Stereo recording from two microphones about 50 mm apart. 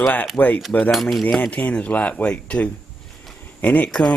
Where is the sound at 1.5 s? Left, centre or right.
Left.